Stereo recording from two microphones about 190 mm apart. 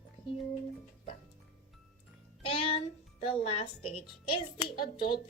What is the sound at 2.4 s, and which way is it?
A child's voice, 30° left (ahead or behind).